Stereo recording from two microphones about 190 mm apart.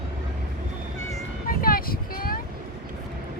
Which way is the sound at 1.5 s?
50° left (ahead or behind).